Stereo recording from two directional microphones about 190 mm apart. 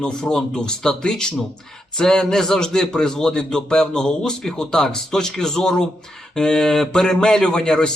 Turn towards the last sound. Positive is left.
turn(degrees=5)  # may be behind; listen again after turning